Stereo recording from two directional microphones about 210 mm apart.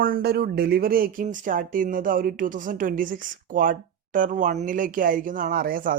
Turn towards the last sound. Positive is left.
turn(degrees=-45)  # may be behind; listen again after turning